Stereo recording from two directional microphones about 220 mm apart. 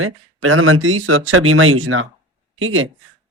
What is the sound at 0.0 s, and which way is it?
Speech, 70° right (ahead or behind).